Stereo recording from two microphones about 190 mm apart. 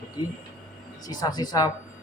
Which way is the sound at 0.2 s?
20° left (ahead or behind).